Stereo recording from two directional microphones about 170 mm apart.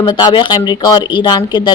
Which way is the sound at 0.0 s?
25° left (ahead or behind).